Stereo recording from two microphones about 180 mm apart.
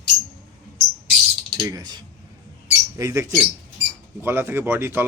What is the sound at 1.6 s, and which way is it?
Typing, 20° right (ahead or behind).